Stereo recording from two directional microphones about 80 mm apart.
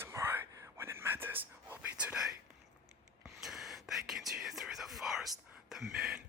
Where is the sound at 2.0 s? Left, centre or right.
Centre.